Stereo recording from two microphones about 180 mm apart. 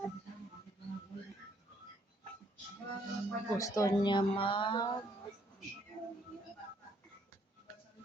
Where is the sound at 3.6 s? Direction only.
20° left (ahead or behind).